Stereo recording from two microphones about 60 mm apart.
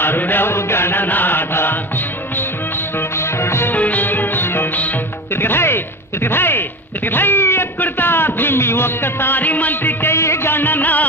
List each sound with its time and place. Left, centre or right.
0.0 s chant: left
3.2 s music: left
3.7 s music: left
6.2 s a sound: left
10.1 s music: left